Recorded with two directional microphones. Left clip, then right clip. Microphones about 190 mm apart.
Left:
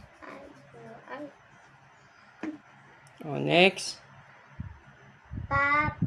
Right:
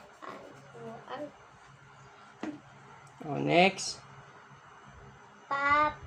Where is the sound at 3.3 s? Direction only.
45° left (ahead or behind).